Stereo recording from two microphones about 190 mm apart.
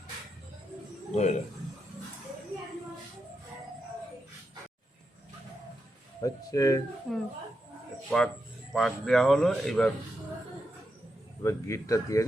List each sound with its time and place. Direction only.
1.1 s a man's voice: 40° left (ahead or behind)
6.2 s speech: 20° left (ahead or behind)
7.1 s a man's voice: centre (ahead or behind)
11.4 s speech: 15° left (ahead or behind)